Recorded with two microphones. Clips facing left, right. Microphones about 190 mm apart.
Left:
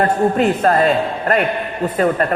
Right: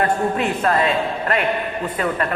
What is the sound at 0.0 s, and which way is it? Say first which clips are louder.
A man's voice: left 5 dB; 40° left (ahead or behind).